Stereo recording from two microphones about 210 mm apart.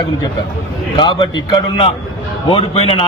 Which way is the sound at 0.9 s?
20° left (ahead or behind).